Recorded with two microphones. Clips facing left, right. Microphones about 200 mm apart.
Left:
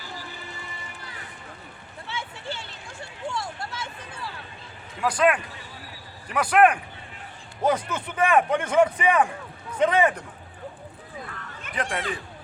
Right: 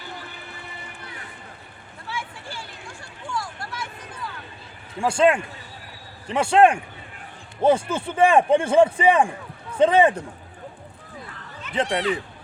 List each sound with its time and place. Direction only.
2.0 s a sound: 25° left (ahead or behind)
4.9 s a man's voice: 25° right (ahead or behind)
11.7 s a man's voice: 25° right (ahead or behind)